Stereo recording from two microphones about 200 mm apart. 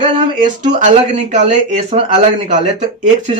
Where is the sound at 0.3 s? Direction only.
40° right (ahead or behind).